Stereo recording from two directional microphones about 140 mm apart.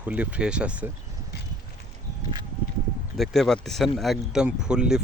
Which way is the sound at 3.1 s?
Centre (ahead or behind).